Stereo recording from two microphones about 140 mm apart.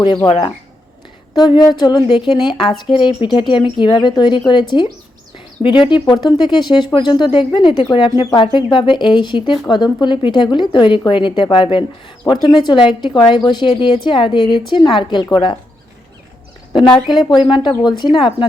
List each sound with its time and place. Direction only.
0.3 s speech: 35° left (ahead or behind)
16.9 s speech: centre (ahead or behind)
17.2 s speech: 30° left (ahead or behind)